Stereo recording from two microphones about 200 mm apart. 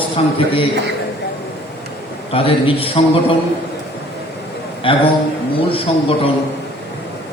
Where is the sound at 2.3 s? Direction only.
25° left (ahead or behind).